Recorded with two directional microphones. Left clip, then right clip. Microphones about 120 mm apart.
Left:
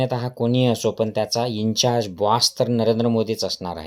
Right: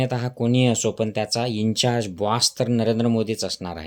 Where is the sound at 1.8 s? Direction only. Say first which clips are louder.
Left 4 dB; 15° right (ahead or behind).